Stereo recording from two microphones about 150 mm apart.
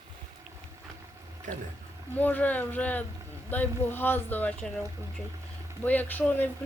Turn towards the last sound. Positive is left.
turn(degrees=10)  # may be behind; listen again after turning